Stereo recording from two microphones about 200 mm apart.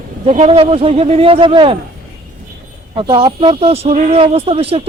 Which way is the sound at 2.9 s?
25° right (ahead or behind).